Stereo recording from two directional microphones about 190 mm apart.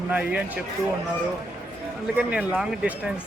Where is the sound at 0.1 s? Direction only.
5° right (ahead or behind).